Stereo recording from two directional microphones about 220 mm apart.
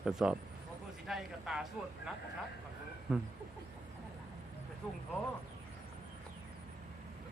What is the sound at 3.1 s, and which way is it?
Speech, 5° right (ahead or behind).